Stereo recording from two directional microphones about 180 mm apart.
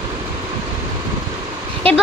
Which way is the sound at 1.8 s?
30° right (ahead or behind).